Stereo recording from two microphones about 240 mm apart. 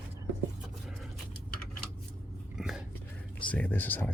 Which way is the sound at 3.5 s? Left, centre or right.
Centre.